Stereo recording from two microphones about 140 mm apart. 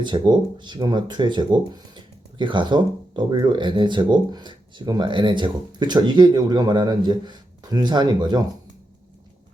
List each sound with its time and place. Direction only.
0.0 s speech: 35° right (ahead or behind)